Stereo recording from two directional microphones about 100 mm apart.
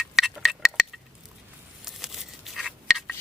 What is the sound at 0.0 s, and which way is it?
Tick-tock, 5° right (ahead or behind).